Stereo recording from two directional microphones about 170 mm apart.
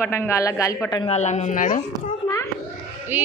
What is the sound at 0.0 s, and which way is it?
A child's voice, 15° left (ahead or behind).